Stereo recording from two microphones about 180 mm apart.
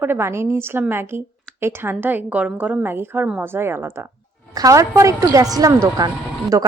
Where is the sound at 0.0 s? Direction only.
15° right (ahead or behind).